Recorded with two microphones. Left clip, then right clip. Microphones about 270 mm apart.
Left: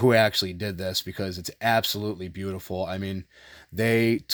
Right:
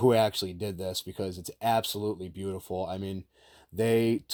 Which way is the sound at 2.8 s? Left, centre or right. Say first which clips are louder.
Left 4 dB; left.